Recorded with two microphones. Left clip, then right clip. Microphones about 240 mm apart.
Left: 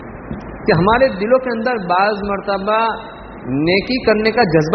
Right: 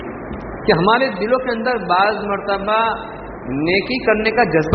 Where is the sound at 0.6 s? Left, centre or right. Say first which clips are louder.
Left 2 dB; left.